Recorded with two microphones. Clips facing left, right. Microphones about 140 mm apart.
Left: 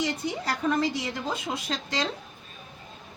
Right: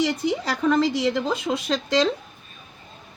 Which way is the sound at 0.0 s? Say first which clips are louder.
Right 6 dB; 90° right.